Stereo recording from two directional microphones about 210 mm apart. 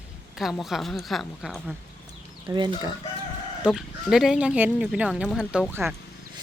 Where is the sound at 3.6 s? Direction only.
Centre (ahead or behind).